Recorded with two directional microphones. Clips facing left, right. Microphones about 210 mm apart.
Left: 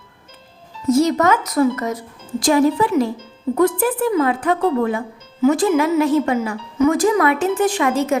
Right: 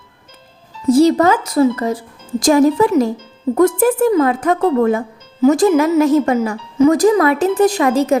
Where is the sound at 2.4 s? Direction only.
45° right (ahead or behind).